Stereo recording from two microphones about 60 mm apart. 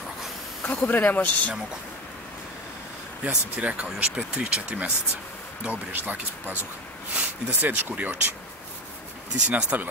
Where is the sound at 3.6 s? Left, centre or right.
Right.